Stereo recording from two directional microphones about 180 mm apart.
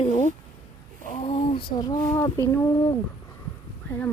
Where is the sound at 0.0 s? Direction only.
40° left (ahead or behind); by 2.4 s 20° left (ahead or behind).